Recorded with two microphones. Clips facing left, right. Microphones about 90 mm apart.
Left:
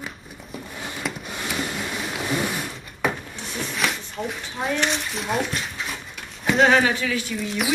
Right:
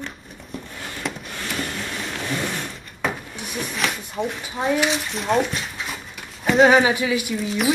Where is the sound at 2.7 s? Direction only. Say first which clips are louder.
Left 1 dB; centre (ahead or behind).